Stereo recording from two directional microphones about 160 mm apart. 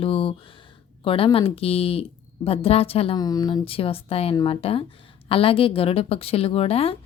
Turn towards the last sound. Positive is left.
turn(degrees=40)  # may be behind; listen again after turning